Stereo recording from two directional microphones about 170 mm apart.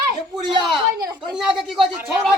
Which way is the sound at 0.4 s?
30° right (ahead or behind).